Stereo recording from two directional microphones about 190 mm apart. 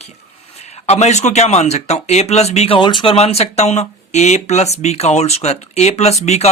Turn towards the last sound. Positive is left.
turn(degrees=35)  # may be behind; listen again after turning